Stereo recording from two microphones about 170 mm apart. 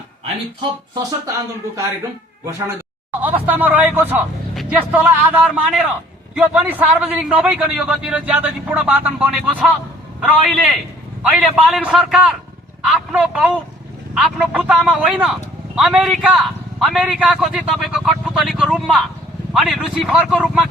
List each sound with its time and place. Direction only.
2.4 s a man's voice: 20° right (ahead or behind); by 20.7 s 5° right (ahead or behind)